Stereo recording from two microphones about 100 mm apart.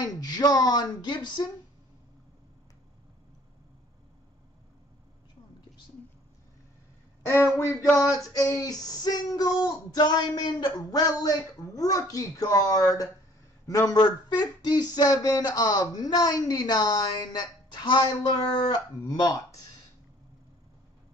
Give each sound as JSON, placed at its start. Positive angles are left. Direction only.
{"t": 0.0, "sound": "speech", "side_deg": 40}
{"t": 7.2, "sound": "speech", "side_deg": 25}